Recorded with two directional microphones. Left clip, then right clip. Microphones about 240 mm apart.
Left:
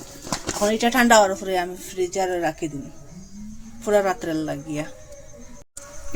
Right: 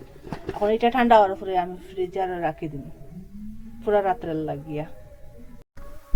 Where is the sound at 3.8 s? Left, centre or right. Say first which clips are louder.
Left 2 dB; left.